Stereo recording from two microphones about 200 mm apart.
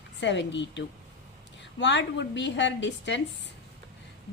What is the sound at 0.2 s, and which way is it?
A woman's voice, 60° left (ahead or behind).